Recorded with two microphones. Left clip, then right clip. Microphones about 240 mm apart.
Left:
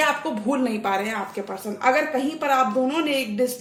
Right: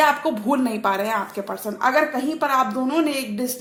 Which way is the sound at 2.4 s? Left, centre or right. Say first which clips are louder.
Even; right.